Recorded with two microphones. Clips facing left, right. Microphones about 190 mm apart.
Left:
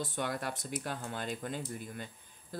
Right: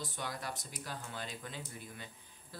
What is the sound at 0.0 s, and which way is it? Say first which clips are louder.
Speech: left 6 dB; 55° left (ahead or behind).